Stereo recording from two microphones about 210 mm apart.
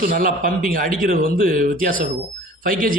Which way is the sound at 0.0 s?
40° right (ahead or behind).